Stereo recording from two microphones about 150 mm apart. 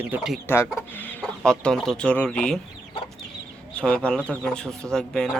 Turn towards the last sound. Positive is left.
turn(degrees=5)  # may be behind; listen again after turning